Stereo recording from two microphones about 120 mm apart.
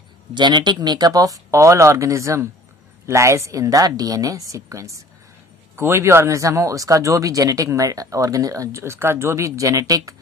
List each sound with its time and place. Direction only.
0.3 s speech: 40° right (ahead or behind)